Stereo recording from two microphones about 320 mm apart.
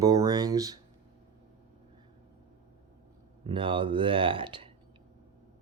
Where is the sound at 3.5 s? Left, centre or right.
Centre.